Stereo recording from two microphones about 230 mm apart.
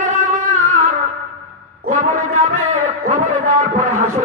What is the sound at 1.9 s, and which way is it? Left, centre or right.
Music, right.